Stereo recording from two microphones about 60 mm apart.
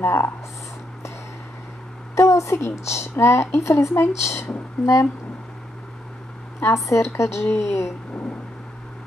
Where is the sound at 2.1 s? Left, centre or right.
Left.